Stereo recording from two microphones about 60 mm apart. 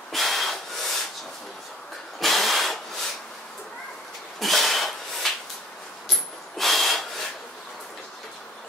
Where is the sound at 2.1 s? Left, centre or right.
Centre.